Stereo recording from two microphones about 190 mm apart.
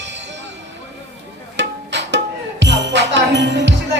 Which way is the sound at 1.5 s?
65° right (ahead or behind).